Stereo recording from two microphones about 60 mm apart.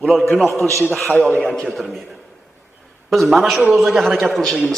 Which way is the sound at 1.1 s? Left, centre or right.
Left.